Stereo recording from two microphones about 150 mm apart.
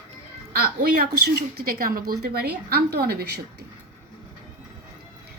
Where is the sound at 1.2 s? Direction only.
90° right.